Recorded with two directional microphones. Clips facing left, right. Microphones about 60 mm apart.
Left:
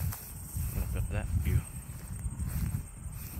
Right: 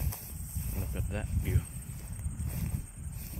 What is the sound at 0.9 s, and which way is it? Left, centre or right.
Speech, centre.